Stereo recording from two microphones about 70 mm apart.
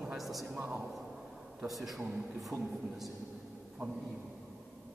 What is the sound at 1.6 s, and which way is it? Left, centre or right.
Speech, centre.